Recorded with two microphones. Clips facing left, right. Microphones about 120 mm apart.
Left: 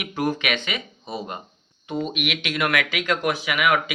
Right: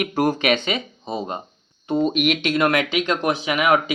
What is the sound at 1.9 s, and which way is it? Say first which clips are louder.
Speech: right 7 dB; 35° right (ahead or behind).